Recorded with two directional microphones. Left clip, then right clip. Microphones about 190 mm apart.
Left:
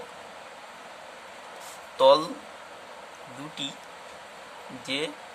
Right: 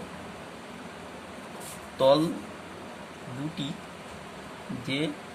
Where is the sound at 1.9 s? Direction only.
25° left (ahead or behind).